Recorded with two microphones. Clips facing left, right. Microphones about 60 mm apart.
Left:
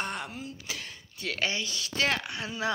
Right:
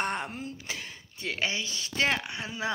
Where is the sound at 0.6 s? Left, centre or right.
Right.